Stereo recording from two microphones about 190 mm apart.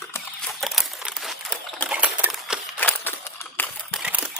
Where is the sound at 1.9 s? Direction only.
5° right (ahead or behind).